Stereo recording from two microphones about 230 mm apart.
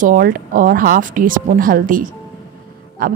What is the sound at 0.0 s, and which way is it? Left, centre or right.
A woman's voice, right.